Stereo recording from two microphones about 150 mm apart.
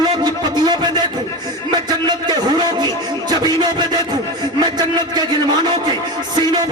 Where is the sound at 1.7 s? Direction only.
30° right (ahead or behind).